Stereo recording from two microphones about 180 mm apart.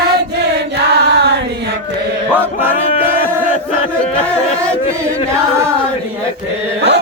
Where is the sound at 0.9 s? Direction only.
70° right (ahead or behind).